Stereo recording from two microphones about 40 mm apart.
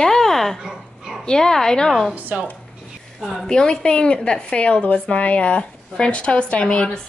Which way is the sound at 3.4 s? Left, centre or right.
Centre.